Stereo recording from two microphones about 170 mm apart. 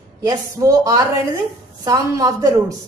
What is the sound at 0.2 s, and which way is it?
A woman's voice, 20° right (ahead or behind).